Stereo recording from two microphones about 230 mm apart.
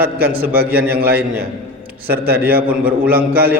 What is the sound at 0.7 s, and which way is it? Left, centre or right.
Speech, centre.